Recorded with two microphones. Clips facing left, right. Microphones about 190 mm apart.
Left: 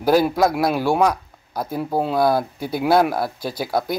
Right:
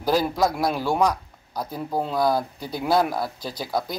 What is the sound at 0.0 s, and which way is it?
A man's voice, 60° left (ahead or behind).